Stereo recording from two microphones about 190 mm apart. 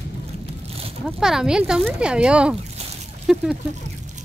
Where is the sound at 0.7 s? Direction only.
30° right (ahead or behind).